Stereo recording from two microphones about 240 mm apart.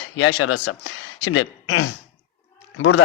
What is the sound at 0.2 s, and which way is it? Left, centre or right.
A man's voice, left.